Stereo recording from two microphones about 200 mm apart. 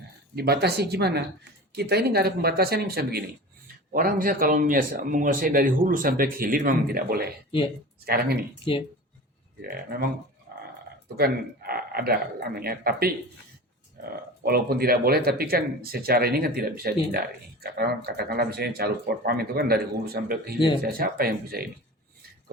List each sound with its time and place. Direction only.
0.3 s speech: 55° right (ahead or behind)
9.6 s speech: 50° right (ahead or behind)
10.5 s dog: 40° right (ahead or behind)
11.2 s speech: 50° right (ahead or behind)